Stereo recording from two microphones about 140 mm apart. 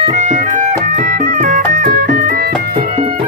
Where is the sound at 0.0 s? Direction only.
55° right (ahead or behind); by 2.9 s 90° right.